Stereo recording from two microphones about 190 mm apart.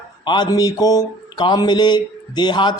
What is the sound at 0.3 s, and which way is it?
A man's voice, 25° left (ahead or behind).